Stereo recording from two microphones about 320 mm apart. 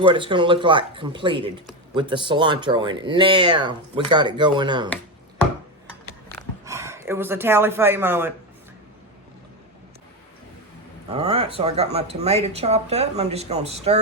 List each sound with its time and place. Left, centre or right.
0.0 s speech: centre
6.7 s speech: centre
11.1 s speech: centre